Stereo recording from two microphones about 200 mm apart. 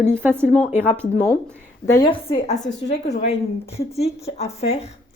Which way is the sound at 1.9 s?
25° left (ahead or behind).